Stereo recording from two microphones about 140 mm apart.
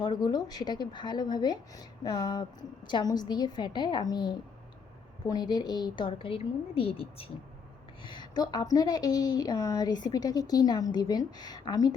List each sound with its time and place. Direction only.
0.0 s a woman's voice: 30° left (ahead or behind)